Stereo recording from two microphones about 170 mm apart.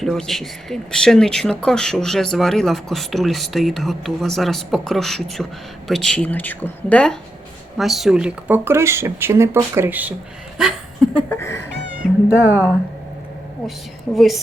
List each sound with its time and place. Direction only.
0.0 s speech: centre (ahead or behind)
10.6 s a sound: centre (ahead or behind)
11.3 s speech: 15° left (ahead or behind)
14.2 s speech: centre (ahead or behind)